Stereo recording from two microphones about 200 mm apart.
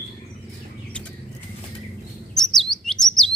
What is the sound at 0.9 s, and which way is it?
Bird flight, 5° left (ahead or behind).